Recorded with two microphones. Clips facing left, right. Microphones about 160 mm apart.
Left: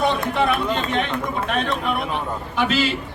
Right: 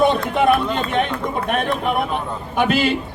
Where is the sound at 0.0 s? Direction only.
50° right (ahead or behind).